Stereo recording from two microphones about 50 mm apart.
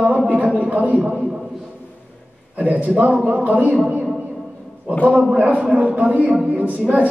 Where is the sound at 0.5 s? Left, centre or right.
Right.